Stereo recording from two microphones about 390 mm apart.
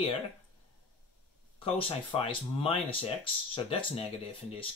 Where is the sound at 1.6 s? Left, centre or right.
Centre.